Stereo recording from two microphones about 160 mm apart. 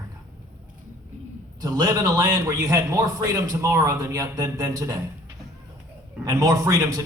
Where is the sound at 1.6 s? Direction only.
20° right (ahead or behind).